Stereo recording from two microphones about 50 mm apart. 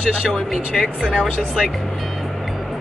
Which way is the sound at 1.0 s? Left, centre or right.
Centre.